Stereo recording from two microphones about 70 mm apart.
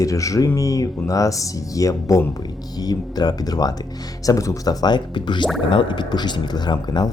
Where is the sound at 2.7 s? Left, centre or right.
Left.